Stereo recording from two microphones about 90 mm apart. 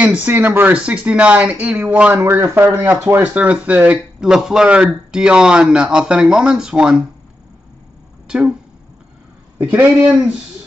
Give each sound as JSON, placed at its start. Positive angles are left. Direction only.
{"t": 0.0, "sound": "a man's voice", "side_deg": -15}
{"t": 2.1, "sound": "speech", "side_deg": -30}
{"t": 3.1, "sound": "a man's voice", "side_deg": -20}
{"t": 8.3, "sound": "speech", "side_deg": -10}
{"t": 9.6, "sound": "a man's voice", "side_deg": -20}